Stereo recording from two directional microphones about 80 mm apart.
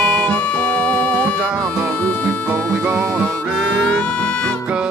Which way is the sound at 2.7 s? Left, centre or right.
Right.